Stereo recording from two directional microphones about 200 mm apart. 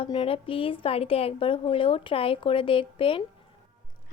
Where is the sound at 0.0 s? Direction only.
30° left (ahead or behind).